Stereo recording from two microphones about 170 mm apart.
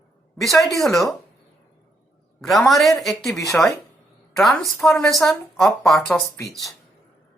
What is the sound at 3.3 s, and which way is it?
Speech, 20° left (ahead or behind).